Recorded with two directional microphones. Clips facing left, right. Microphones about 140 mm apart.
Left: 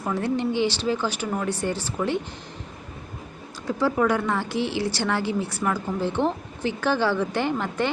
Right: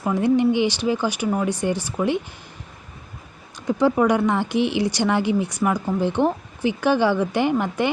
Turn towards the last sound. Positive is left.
turn(degrees=-15)  # may be behind; listen again after turning